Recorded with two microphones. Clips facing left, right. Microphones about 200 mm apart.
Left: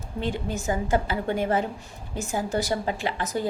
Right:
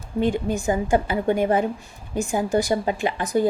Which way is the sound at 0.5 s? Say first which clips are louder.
Right 4 dB; 15° right (ahead or behind).